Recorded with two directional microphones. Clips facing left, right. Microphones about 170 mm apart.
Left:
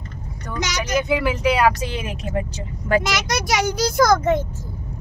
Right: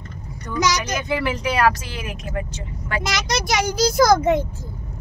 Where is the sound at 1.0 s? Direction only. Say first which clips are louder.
Left 3 dB; 5° left (ahead or behind).